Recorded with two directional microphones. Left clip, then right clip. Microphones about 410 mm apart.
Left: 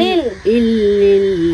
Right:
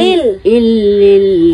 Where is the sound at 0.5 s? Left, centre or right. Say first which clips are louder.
Right 2 dB; centre.